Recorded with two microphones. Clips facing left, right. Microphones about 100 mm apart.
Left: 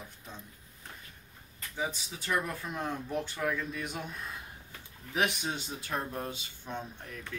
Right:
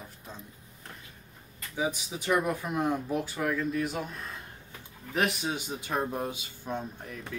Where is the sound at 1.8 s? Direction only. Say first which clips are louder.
Right 5 dB; 15° right (ahead or behind).